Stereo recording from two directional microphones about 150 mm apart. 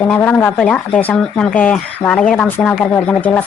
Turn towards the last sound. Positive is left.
turn(degrees=10)  # may be behind; listen again after turning